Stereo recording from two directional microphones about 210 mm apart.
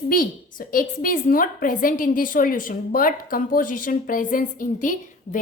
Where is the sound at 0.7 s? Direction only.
45° left (ahead or behind).